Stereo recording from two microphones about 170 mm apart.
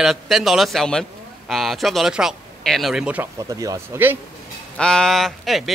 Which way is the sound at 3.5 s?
20° right (ahead or behind).